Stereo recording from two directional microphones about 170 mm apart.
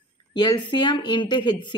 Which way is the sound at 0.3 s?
25° left (ahead or behind).